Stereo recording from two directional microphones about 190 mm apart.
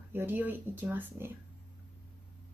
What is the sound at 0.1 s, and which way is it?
Music, 10° right (ahead or behind).